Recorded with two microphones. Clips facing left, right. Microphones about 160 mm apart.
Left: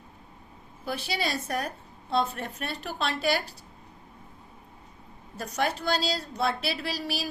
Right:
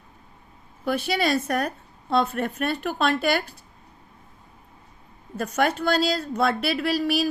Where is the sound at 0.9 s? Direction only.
60° right (ahead or behind).